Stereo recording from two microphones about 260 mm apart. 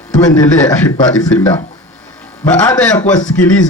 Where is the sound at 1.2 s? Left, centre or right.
Centre.